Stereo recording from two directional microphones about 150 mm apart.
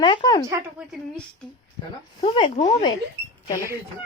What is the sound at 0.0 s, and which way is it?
Speech, 30° left (ahead or behind).